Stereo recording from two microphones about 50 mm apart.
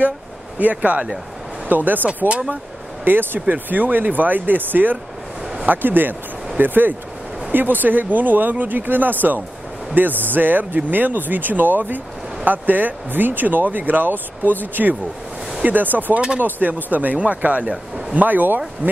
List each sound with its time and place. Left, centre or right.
0.6 s speech: right
3.3 s speech: right